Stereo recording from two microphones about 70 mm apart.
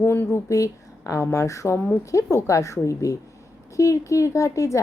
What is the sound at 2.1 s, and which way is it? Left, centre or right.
A woman's voice, left.